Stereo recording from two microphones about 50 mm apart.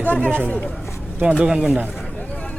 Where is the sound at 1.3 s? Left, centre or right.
Centre.